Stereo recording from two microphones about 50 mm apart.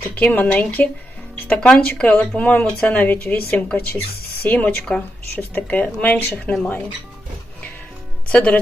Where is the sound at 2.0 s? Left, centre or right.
Centre.